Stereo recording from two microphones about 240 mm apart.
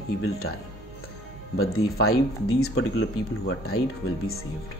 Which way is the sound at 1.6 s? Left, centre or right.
Left.